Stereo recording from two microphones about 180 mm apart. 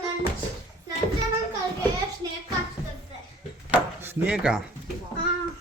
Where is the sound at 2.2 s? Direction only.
20° right (ahead or behind).